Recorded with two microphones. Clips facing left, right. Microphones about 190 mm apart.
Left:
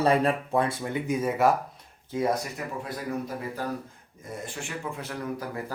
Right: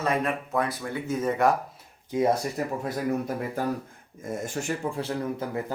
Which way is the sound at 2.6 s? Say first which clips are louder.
Right 6 dB; 35° right (ahead or behind).